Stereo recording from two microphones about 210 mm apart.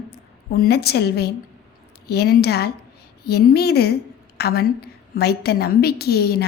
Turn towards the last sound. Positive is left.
turn(degrees=50)  # may be behind; listen again after turning